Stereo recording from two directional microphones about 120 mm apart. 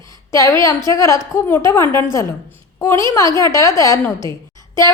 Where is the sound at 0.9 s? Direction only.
25° left (ahead or behind).